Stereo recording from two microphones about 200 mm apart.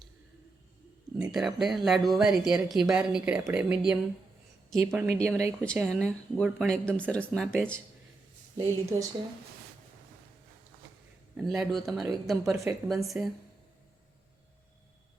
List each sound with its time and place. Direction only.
1.2 s speech: centre (ahead or behind)
5.0 s speech: 15° right (ahead or behind)
5.4 s speech: 5° left (ahead or behind)
8.5 s speech: 15° right (ahead or behind)
11.3 s speech: centre (ahead or behind)